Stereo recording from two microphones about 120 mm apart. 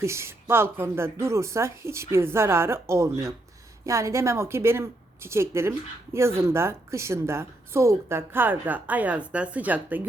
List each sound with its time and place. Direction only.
0.0 s a woman's voice: 20° right (ahead or behind)